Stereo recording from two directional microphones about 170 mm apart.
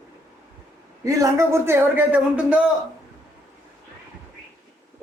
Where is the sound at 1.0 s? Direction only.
20° right (ahead or behind).